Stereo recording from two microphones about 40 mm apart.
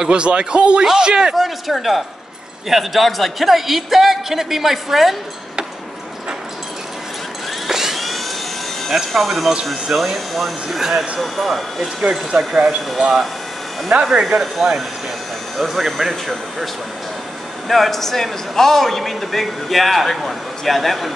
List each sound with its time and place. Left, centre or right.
0.1 s speech: right
1.3 s a man's voice: centre
7.6 s vehicle: centre
8.8 s a man's voice: centre
12.0 s speech: centre
13.9 s speech: right
14.4 s a man's voice: centre
17.6 s a man's voice: centre